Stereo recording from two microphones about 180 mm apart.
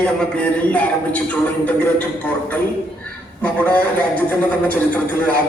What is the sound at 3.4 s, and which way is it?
A man's voice, 10° left (ahead or behind).